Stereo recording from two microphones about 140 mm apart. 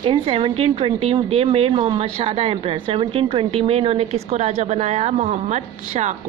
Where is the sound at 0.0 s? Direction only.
40° right (ahead or behind); by 6.1 s 55° right (ahead or behind).